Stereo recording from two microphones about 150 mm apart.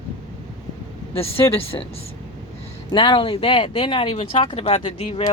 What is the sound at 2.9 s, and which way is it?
Speech, 35° left (ahead or behind).